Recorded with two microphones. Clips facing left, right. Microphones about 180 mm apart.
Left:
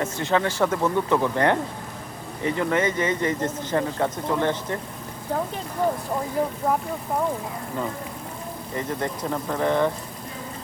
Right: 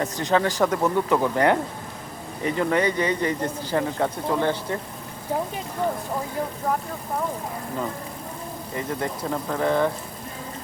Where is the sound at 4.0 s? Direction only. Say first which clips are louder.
Even; 10° right (ahead or behind).